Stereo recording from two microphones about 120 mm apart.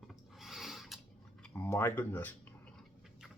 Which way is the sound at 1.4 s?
15° left (ahead or behind).